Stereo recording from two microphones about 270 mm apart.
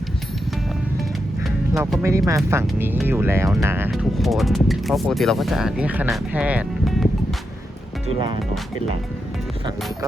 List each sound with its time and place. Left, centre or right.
1.5 s speech: centre
8.0 s speech: centre